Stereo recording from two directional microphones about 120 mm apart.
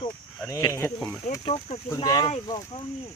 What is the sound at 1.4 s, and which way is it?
Speech, 55° left (ahead or behind).